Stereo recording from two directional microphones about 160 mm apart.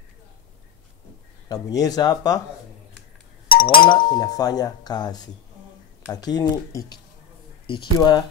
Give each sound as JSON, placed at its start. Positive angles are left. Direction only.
{"t": 1.5, "sound": "speech", "side_deg": 25}
{"t": 3.6, "sound": "speech", "side_deg": 30}